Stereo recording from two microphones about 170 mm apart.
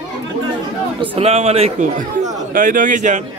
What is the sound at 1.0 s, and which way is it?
A man's voice, 35° right (ahead or behind).